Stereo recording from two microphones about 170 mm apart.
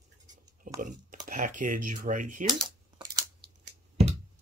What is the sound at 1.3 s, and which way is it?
Speech, 50° right (ahead or behind).